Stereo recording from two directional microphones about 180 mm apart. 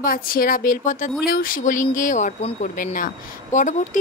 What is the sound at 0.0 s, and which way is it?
Speech, 50° left (ahead or behind).